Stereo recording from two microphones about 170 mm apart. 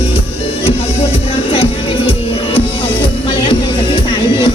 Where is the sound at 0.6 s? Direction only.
35° left (ahead or behind).